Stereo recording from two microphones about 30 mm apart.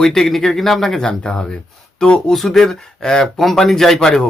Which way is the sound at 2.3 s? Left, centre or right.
Centre.